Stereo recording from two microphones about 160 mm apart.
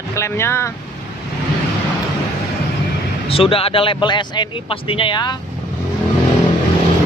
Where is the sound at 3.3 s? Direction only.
35° left (ahead or behind).